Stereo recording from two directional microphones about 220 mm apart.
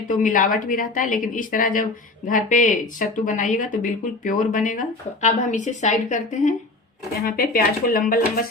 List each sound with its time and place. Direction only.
0.1 s speech: 35° left (ahead or behind)